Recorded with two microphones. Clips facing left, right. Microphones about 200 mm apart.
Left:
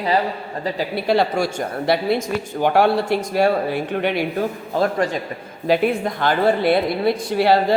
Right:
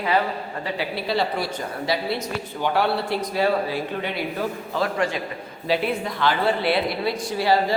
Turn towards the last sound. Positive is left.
turn(degrees=60)  # may be behind; listen again after turning